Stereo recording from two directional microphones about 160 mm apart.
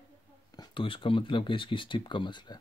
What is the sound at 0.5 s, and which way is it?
Speech, 30° left (ahead or behind).